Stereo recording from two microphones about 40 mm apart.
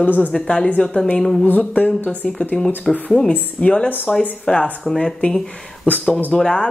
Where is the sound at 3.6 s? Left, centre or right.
Left.